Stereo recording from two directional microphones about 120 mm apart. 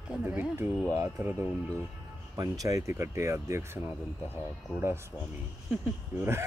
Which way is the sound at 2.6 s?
25° right (ahead or behind).